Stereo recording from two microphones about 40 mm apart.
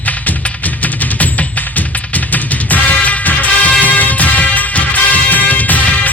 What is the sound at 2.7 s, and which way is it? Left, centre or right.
Music, left.